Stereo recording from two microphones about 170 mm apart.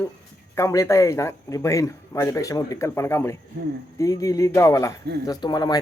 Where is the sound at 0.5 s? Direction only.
15° left (ahead or behind).